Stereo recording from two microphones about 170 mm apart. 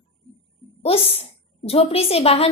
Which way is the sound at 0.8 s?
35° left (ahead or behind).